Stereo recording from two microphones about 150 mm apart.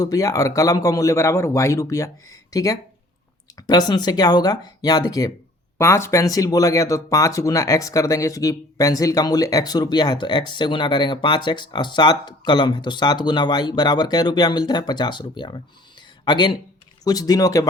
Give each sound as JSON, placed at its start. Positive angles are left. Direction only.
{"t": 0.0, "sound": "speech", "side_deg": 25}